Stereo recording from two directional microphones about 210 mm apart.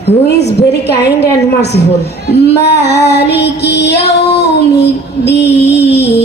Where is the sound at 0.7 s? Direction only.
50° left (ahead or behind).